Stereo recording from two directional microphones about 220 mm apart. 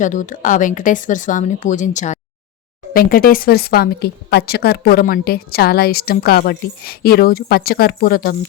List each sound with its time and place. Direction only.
0.0 s a woman's voice: 35° left (ahead or behind)